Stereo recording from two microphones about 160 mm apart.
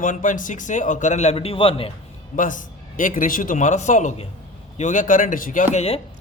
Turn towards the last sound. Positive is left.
turn(degrees=55)  # may be behind; listen again after turning